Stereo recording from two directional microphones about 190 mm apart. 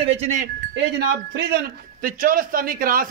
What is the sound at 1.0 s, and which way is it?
A man's voice, 60° right (ahead or behind).